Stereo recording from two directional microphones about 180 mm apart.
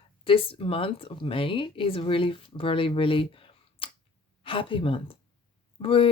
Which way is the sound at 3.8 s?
30° left (ahead or behind).